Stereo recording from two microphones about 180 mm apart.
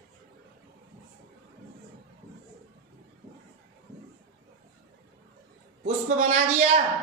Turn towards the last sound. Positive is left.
turn(degrees=-40)  # may be behind; listen again after turning